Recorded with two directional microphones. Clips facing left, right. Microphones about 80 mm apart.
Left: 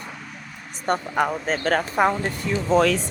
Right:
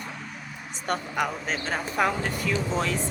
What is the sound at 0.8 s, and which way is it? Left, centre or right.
Speech, left.